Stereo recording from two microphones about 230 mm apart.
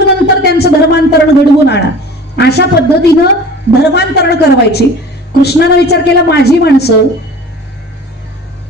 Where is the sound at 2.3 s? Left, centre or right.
Left.